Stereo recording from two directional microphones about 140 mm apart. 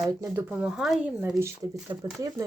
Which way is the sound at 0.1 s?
25° right (ahead or behind).